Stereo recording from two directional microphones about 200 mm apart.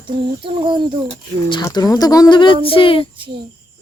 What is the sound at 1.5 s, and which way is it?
Speech, 20° left (ahead or behind).